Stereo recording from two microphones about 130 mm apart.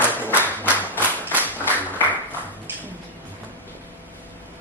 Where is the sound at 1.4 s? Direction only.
15° left (ahead or behind).